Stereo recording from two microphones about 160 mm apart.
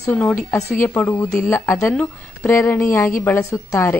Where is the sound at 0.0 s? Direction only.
10° left (ahead or behind).